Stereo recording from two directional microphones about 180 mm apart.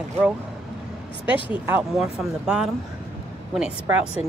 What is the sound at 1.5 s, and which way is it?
Speech, 10° right (ahead or behind).